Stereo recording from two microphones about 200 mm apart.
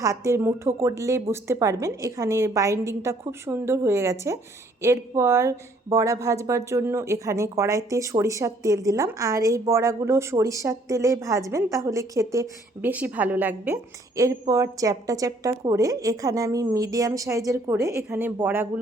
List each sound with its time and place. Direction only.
0.0 s a woman's voice: 15° right (ahead or behind)